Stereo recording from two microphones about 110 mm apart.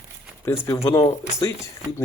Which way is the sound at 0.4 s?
20° left (ahead or behind).